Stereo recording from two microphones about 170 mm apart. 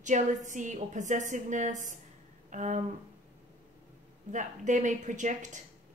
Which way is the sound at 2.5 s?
45° right (ahead or behind).